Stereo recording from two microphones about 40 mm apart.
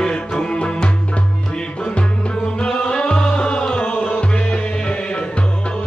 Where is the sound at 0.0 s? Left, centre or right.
Left.